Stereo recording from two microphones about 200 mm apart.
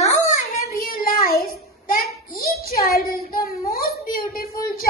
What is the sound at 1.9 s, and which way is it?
Child singing, 45° left (ahead or behind).